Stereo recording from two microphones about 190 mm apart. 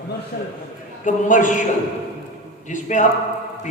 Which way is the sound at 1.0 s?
40° left (ahead or behind).